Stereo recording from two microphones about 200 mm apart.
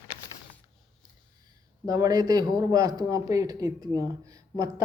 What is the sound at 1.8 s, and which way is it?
Speech, 20° right (ahead or behind).